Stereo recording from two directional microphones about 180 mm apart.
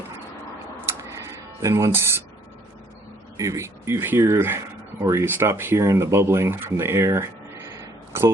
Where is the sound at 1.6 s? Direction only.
15° right (ahead or behind).